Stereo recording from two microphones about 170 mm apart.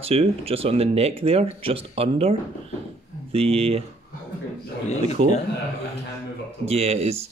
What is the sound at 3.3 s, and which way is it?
Speech, 35° right (ahead or behind).